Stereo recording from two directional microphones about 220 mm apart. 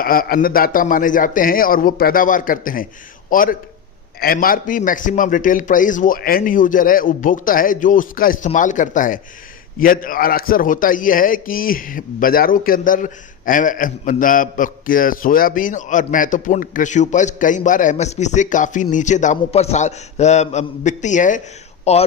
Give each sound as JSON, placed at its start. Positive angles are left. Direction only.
{"t": 0.0, "sound": "a man's voice", "side_deg": 40}